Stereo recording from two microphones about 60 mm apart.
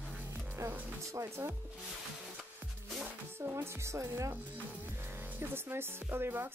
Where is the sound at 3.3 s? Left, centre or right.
Right.